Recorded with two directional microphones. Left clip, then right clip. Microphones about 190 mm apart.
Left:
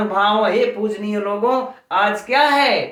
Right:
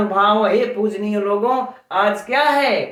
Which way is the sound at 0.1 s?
15° right (ahead or behind).